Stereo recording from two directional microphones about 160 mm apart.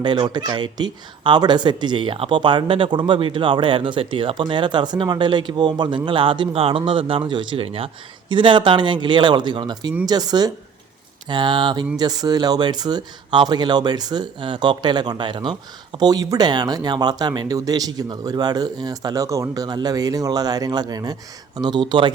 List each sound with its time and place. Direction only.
0.0 s speech: 30° right (ahead or behind)